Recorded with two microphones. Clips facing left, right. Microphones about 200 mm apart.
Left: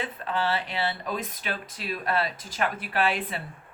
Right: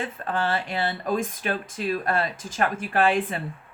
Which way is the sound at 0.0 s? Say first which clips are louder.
Right 2 dB; 50° right (ahead or behind).